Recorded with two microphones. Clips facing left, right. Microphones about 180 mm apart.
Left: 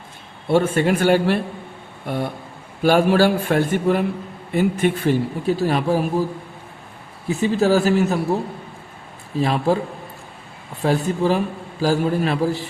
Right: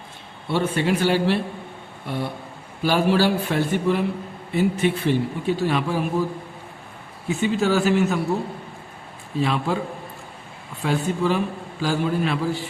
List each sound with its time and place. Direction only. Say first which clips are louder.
0.5 s a man's voice: left 4 dB; 50° left (ahead or behind)
7.3 s a man's voice: left 3 dB; 35° left (ahead or behind)
9.4 s a man's voice: left 4 dB; 40° left (ahead or behind)
10.8 s a man's voice: left 3 dB; 35° left (ahead or behind)